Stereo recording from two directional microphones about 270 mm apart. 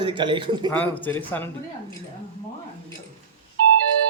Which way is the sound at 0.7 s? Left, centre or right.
Centre.